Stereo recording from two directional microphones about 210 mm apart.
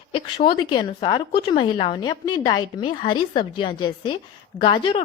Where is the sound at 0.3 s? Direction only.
20° left (ahead or behind).